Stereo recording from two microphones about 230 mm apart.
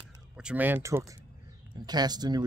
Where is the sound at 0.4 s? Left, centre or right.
Centre.